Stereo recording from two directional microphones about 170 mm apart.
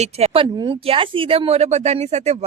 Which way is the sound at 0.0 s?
35° right (ahead or behind).